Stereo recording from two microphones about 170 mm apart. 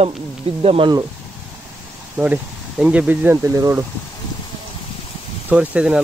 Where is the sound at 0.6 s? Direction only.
30° right (ahead or behind).